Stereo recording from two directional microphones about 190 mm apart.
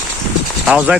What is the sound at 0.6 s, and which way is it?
Speech, 5° right (ahead or behind).